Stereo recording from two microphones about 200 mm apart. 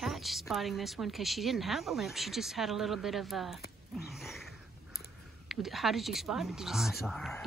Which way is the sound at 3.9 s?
Centre (ahead or behind).